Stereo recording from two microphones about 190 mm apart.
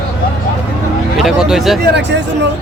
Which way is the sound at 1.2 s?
Centre (ahead or behind).